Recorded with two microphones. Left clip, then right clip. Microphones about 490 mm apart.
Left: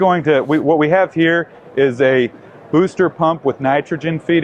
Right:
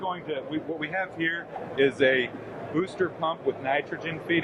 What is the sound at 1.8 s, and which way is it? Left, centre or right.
Speech, left.